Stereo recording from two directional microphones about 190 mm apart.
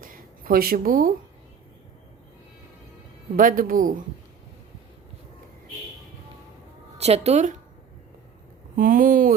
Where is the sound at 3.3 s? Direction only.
45° right (ahead or behind).